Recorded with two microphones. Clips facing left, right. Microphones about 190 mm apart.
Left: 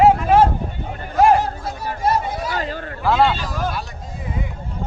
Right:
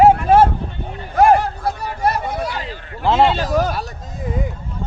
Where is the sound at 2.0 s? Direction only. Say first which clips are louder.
Even; 60° right (ahead or behind).